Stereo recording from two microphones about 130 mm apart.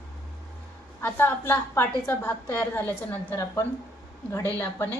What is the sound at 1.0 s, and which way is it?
A woman's voice, 15° left (ahead or behind).